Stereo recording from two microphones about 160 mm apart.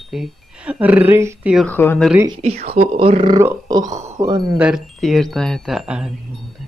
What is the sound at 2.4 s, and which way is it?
Speech, 40° right (ahead or behind).